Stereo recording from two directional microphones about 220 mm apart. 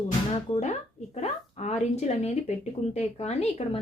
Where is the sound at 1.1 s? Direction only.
30° left (ahead or behind).